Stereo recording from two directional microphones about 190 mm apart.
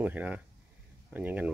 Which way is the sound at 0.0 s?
10° right (ahead or behind).